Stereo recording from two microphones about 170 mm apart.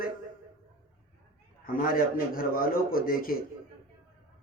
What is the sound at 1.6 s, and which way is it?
A man's voice, 60° left (ahead or behind).